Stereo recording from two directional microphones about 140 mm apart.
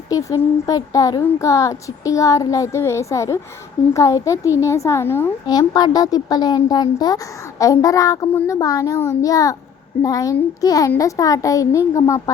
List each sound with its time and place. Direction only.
0.1 s a woman's voice: 25° left (ahead or behind)
5.5 s a woman's voice: 30° left (ahead or behind)
8.3 s speech: 15° left (ahead or behind)
8.5 s a woman's voice: 25° left (ahead or behind)